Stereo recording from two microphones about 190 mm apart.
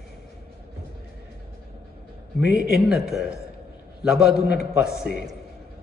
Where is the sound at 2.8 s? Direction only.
Centre (ahead or behind).